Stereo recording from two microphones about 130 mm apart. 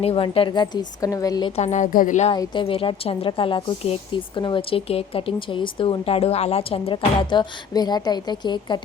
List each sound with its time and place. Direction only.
0.0 s a woman's voice: 45° left (ahead or behind)
1.5 s a woman's voice: 65° left (ahead or behind)
2.3 s a woman's voice: 35° left (ahead or behind)